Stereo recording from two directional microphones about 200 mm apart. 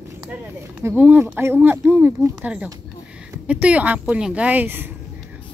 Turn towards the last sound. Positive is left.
turn(degrees=-10)  # may be behind; listen again after turning